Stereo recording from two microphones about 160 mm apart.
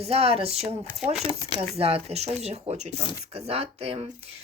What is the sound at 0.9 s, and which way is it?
Speech, 5° right (ahead or behind).